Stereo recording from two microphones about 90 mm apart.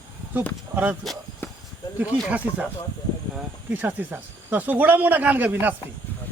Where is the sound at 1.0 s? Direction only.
Centre (ahead or behind).